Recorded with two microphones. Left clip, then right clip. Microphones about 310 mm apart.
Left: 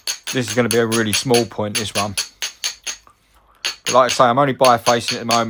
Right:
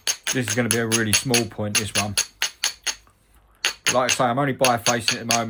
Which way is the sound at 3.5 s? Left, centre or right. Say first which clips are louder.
Left 3 dB; centre.